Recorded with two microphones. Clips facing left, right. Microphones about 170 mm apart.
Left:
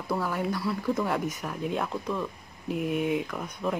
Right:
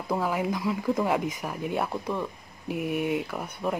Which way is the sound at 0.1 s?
10° right (ahead or behind).